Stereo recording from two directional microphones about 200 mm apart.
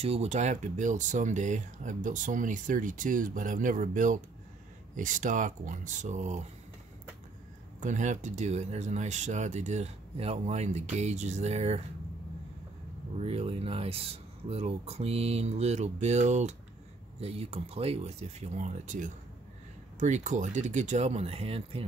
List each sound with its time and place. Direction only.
0.0 s speech: 30° right (ahead or behind)
7.8 s speech: 40° right (ahead or behind)
13.2 s speech: 30° right (ahead or behind)